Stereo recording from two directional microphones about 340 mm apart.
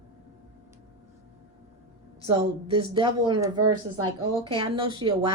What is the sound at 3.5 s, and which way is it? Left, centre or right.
Speech, right.